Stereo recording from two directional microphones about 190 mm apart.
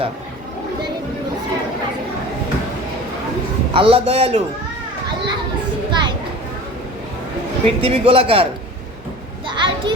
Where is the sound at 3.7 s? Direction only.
30° right (ahead or behind).